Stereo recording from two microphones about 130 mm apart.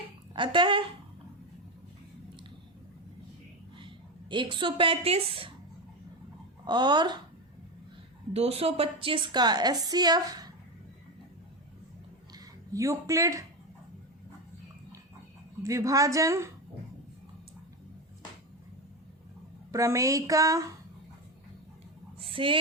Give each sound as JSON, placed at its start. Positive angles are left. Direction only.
{"t": 0.3, "sound": "a woman's voice", "side_deg": -40}
{"t": 3.8, "sound": "a woman's voice", "side_deg": -40}
{"t": 6.7, "sound": "a woman's voice", "side_deg": -35}
{"t": 8.3, "sound": "a woman's voice", "side_deg": -55}
{"t": 12.3, "sound": "a sound", "side_deg": -25}
{"t": 15.6, "sound": "a woman's voice", "side_deg": -25}
{"t": 19.7, "sound": "a woman's voice", "side_deg": -25}
{"t": 22.2, "sound": "a sound", "side_deg": -45}